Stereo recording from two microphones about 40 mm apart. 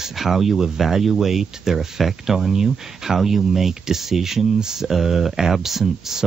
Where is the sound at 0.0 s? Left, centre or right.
Centre.